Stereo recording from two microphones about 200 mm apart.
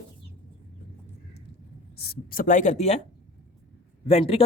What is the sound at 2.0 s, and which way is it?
Speech, 50° left (ahead or behind).